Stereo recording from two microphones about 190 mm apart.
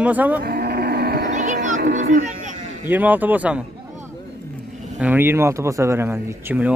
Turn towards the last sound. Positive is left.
turn(degrees=-10)  # may be behind; listen again after turning